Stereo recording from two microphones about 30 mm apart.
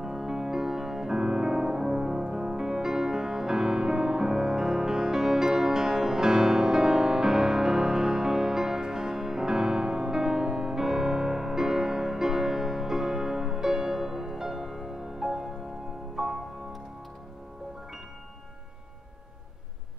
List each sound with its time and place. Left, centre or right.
0.0 s music: centre
14.3 s music: centre